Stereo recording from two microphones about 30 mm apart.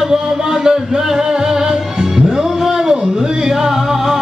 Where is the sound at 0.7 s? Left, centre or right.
Centre.